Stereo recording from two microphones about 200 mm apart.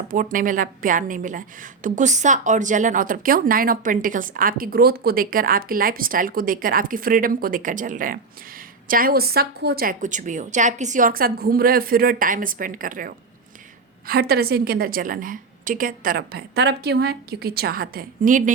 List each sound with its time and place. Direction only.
0.1 s a woman's voice: 40° right (ahead or behind)